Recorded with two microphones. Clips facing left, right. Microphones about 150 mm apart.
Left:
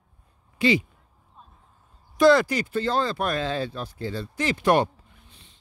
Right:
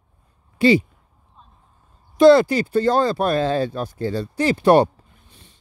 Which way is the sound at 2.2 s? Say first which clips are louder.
Right 6 dB; 30° right (ahead or behind).